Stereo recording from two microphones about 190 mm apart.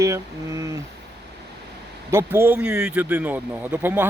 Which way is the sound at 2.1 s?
10° right (ahead or behind).